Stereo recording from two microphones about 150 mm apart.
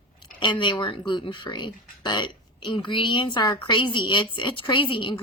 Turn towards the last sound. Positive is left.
turn(degrees=35)  # may be behind; listen again after turning